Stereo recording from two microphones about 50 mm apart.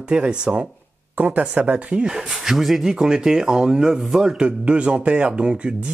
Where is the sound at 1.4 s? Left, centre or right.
Right.